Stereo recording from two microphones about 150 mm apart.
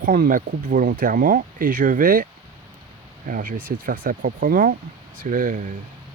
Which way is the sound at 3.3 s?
65° right (ahead or behind).